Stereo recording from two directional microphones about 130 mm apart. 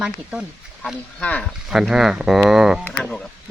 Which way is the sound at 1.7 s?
5° right (ahead or behind).